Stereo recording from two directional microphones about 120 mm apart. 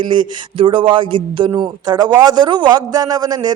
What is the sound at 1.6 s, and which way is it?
A man's voice, 35° right (ahead or behind).